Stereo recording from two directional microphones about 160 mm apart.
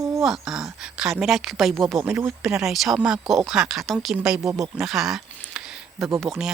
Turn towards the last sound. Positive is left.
turn(degrees=0)  # may be behind; listen again after turning